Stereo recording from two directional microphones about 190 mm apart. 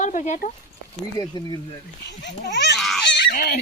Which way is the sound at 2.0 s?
65° left (ahead or behind).